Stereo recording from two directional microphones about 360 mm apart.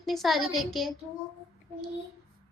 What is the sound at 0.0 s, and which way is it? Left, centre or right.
Speech, centre.